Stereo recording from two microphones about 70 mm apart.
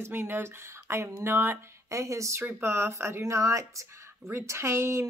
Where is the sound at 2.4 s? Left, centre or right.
Right.